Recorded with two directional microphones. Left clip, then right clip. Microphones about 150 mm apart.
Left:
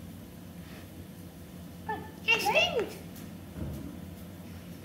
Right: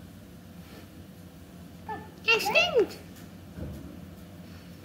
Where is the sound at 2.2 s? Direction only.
90° right.